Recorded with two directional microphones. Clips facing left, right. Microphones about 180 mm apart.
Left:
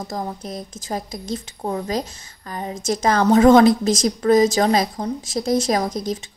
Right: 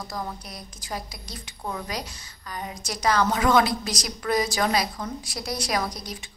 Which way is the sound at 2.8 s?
45° left (ahead or behind).